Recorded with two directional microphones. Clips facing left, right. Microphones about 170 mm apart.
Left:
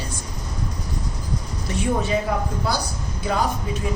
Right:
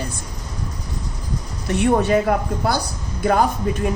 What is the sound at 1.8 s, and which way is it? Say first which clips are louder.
A woman's voice: right 6 dB; 65° right (ahead or behind).